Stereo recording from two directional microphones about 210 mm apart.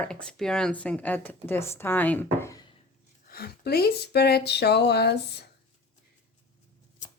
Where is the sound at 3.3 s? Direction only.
50° left (ahead or behind).